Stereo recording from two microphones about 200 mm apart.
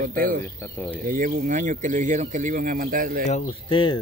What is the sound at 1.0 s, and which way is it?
Speech, 45° right (ahead or behind).